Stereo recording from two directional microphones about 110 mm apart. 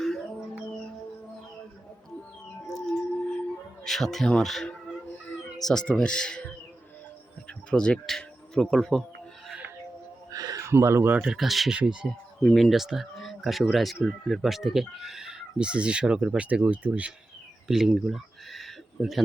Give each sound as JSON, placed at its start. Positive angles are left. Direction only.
{"t": 2.7, "sound": "music", "side_deg": 5}
{"t": 3.8, "sound": "speech", "side_deg": 0}
{"t": 7.7, "sound": "speech", "side_deg": 10}
{"t": 10.3, "sound": "a sound", "side_deg": -35}
{"t": 11.3, "sound": "speech", "side_deg": 0}